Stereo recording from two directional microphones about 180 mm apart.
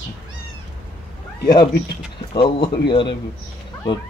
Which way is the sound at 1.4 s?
20° left (ahead or behind).